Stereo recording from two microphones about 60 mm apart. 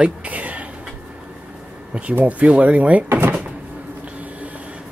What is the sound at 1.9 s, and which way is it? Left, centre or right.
Speech, right.